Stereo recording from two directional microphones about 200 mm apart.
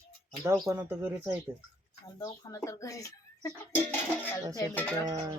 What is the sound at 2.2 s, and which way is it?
Speech, 15° left (ahead or behind).